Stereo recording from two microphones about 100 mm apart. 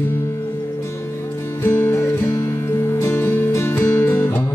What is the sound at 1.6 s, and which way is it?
Music, 20° left (ahead or behind).